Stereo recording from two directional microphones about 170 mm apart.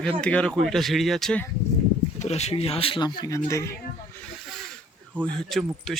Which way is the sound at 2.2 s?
40° left (ahead or behind).